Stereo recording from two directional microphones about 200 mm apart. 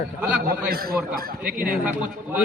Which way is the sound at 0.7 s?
50° right (ahead or behind).